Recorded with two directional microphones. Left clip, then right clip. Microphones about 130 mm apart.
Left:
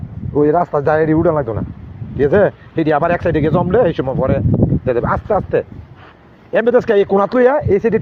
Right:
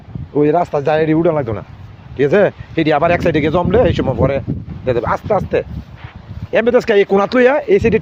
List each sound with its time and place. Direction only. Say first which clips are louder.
0.3 s speech: even; 45° right (ahead or behind)